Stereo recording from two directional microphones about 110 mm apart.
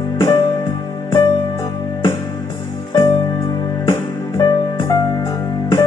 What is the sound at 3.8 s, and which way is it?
Music, 30° left (ahead or behind).